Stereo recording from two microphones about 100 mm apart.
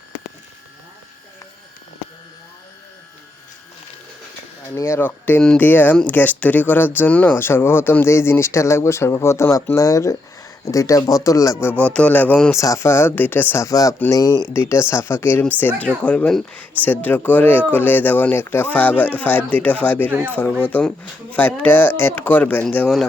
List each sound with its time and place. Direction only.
4.7 s speech: 25° left (ahead or behind)
11.6 s speech: 15° left (ahead or behind)
12.5 s speech: 30° left (ahead or behind)
13.7 s speech: 35° left (ahead or behind)
14.5 s speech: 25° left (ahead or behind)
16.0 s speech: 10° left (ahead or behind)